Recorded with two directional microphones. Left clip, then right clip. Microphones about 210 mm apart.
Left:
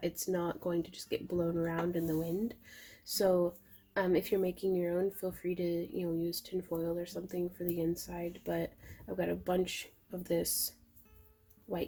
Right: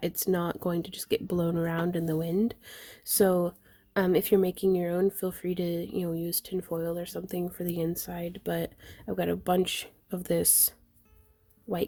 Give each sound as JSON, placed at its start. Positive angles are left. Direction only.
{"t": 0.0, "sound": "speech", "side_deg": -60}